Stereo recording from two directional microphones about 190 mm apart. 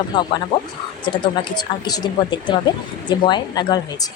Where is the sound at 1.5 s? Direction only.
20° left (ahead or behind).